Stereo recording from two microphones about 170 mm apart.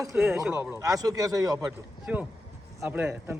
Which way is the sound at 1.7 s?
10° right (ahead or behind).